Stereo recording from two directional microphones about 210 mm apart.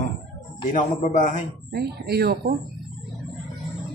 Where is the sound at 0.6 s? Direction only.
35° left (ahead or behind).